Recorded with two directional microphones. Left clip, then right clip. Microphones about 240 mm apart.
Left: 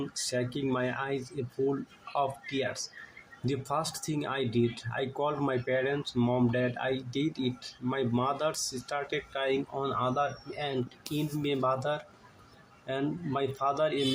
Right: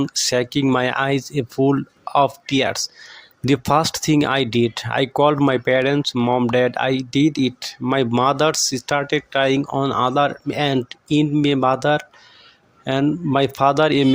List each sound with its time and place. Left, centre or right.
0.0 s speech: right